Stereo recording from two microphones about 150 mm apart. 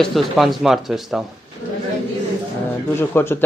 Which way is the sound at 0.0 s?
Centre (ahead or behind).